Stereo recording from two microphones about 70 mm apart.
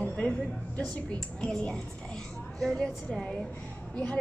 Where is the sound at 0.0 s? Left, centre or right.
Centre.